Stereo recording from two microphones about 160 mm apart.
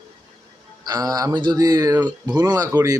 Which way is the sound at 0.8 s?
25° right (ahead or behind).